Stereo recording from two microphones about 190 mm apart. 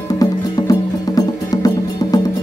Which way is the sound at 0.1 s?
20° left (ahead or behind).